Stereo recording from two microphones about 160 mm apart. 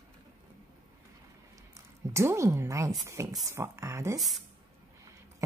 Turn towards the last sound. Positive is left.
turn(degrees=0)  # may be behind; listen again after turning